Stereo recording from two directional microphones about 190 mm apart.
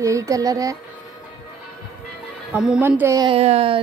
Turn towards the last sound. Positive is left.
turn(degrees=-30)  # may be behind; listen again after turning